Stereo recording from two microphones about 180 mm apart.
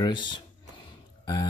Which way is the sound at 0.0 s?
25° left (ahead or behind).